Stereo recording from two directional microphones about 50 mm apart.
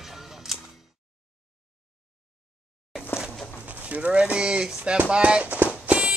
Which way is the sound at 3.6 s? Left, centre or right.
Right.